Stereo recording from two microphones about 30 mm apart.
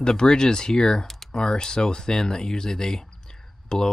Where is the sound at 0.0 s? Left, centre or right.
Left.